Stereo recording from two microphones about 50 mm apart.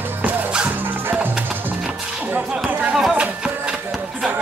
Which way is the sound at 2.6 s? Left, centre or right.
Right.